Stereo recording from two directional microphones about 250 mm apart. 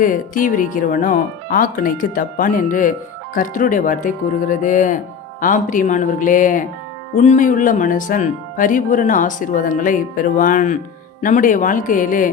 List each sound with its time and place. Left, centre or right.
0.0 s speech: left